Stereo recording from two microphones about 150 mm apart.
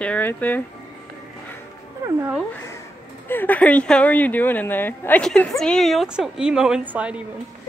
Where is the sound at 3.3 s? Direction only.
10° left (ahead or behind); by 7.2 s 10° right (ahead or behind).